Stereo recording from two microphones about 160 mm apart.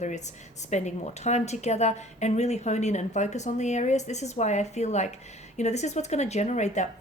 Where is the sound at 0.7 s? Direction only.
45° left (ahead or behind).